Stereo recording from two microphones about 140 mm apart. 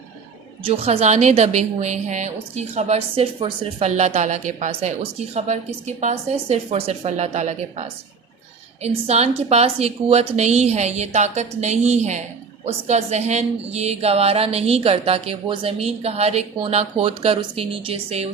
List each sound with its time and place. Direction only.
0.6 s a woman's voice: 45° right (ahead or behind)